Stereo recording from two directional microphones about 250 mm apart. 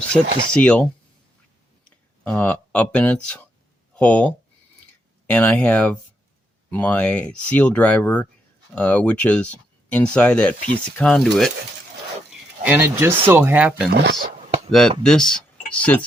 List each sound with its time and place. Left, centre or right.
0.5 s speech: centre
2.2 s speech: centre
12.6 s speech: centre
13.9 s speech: right
14.7 s speech: centre